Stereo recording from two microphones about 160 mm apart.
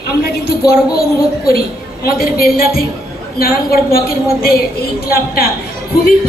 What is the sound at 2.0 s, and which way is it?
Speech, 70° left (ahead or behind).